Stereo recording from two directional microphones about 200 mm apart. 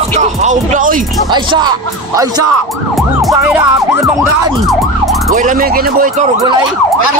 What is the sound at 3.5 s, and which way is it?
Music, 10° right (ahead or behind).